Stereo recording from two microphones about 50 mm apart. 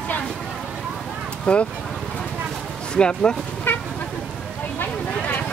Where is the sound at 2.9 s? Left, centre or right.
Centre.